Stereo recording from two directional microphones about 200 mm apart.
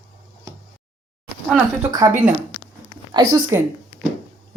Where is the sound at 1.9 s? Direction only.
20° right (ahead or behind).